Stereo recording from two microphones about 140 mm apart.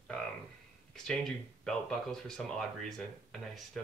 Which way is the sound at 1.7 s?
5° left (ahead or behind).